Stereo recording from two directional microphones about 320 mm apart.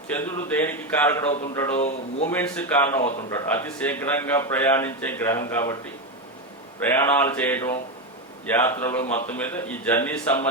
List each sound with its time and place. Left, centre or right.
0.1 s a man's voice: centre
1.7 s speech: left
2.3 s a man's voice: centre
6.8 s a man's voice: centre